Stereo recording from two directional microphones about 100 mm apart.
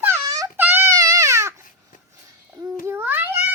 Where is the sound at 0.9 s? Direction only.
35° right (ahead or behind).